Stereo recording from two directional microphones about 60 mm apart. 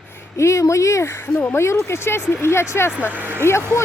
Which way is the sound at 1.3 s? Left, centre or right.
Left.